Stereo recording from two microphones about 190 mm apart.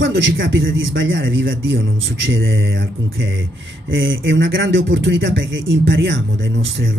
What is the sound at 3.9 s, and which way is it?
Speech, 85° right.